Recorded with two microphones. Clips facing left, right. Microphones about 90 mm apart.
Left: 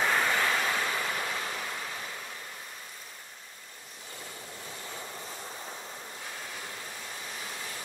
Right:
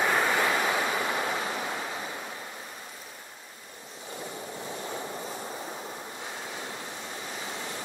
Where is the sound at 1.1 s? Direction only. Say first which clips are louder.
Right 4 dB; 25° right (ahead or behind).